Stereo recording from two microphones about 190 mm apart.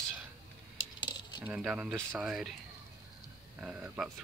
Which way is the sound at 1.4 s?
5° right (ahead or behind).